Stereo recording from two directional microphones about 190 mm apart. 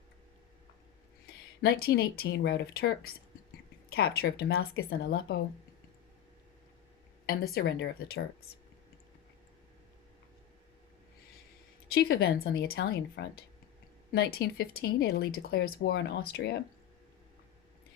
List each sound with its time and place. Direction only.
1.6 s speech: 55° left (ahead or behind)
7.5 s speech: 60° left (ahead or behind)
11.9 s speech: 55° left (ahead or behind)